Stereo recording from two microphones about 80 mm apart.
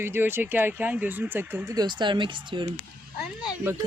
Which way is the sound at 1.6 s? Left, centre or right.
Right.